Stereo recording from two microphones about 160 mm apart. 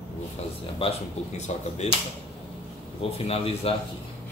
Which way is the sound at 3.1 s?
40° left (ahead or behind).